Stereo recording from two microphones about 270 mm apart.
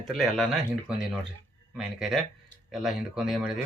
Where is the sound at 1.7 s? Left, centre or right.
Centre.